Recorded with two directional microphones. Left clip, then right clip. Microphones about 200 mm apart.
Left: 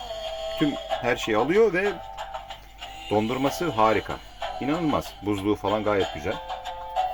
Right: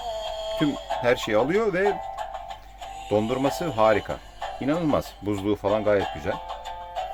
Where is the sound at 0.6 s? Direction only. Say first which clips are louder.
Right 1 dB; 30° right (ahead or behind).